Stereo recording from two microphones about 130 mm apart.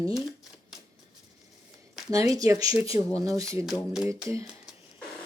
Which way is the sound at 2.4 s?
25° right (ahead or behind).